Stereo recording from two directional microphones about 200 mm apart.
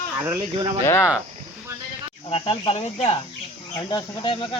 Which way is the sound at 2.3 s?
25° left (ahead or behind).